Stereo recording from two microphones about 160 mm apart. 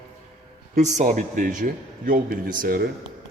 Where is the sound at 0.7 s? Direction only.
45° right (ahead or behind).